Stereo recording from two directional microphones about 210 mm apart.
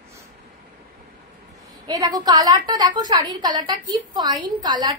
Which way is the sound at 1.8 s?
15° right (ahead or behind).